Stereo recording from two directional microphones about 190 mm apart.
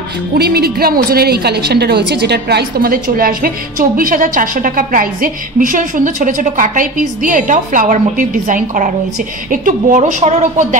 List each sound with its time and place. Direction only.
0.3 s a woman's voice: 55° right (ahead or behind)